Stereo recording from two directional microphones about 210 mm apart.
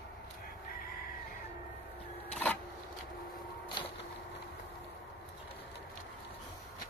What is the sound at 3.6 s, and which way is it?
Vehicle, 20° left (ahead or behind).